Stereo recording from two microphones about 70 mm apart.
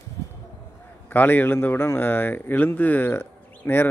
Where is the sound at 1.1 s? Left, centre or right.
Left.